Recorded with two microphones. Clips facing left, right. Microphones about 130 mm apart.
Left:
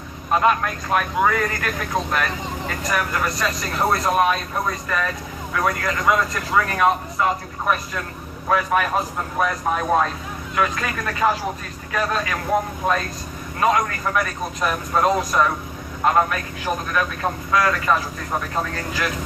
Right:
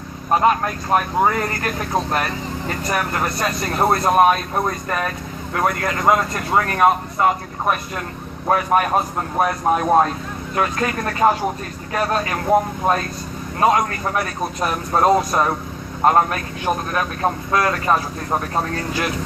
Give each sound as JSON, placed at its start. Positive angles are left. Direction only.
{"t": 0.3, "sound": "a man's voice", "side_deg": -35}
{"t": 13.6, "sound": "a man's voice", "side_deg": -35}